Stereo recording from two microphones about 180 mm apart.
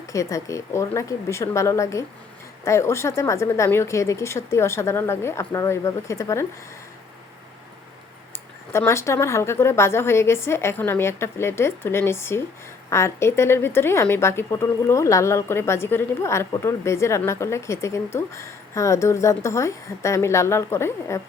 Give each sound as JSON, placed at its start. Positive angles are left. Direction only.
{"t": 0.1, "sound": "speech", "side_deg": 15}
{"t": 8.7, "sound": "speech", "side_deg": 15}